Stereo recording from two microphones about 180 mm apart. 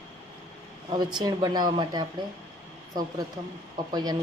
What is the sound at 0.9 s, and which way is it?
A woman's voice, 25° right (ahead or behind).